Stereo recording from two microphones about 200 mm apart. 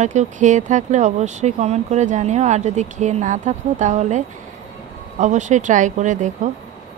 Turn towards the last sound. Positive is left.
turn(degrees=-40)  # may be behind; listen again after turning